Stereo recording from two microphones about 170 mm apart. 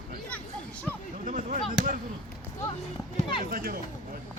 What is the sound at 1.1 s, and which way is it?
Speech, 50° right (ahead or behind).